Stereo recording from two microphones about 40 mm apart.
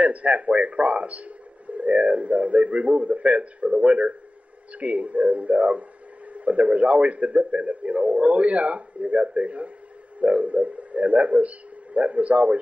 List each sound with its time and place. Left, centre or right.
0.0 s a man's voice: right